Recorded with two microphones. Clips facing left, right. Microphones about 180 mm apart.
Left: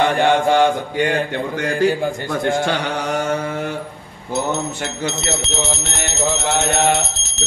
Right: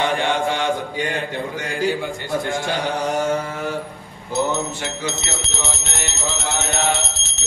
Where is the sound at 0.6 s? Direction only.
60° left (ahead or behind).